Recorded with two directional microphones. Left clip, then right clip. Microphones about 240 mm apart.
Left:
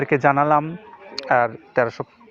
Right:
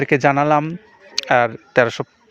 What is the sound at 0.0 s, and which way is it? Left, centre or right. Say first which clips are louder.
Speech: right 2 dB; right.